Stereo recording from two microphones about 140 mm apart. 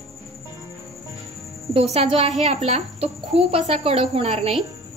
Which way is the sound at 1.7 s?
50° right (ahead or behind).